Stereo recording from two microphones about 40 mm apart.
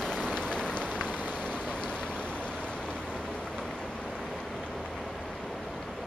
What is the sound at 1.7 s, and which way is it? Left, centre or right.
Boat, left.